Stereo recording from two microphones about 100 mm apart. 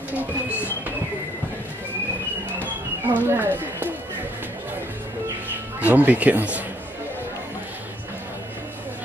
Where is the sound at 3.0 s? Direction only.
20° right (ahead or behind).